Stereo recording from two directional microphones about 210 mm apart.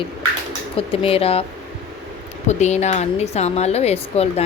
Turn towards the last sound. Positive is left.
turn(degrees=30)  # may be behind; listen again after turning